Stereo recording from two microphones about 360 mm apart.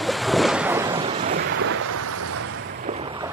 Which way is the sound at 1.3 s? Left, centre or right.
Right.